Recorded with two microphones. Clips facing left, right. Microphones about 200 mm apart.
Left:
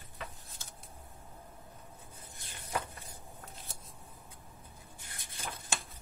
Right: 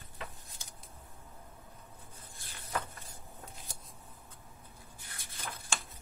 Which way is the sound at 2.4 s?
20° left (ahead or behind).